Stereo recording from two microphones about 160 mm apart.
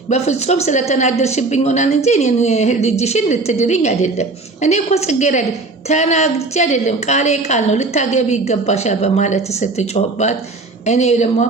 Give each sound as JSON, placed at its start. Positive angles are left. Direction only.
{"t": 0.1, "sound": "a woman's voice", "side_deg": 45}